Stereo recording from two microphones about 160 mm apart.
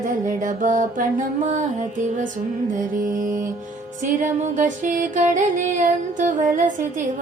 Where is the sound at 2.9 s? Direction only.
60° right (ahead or behind).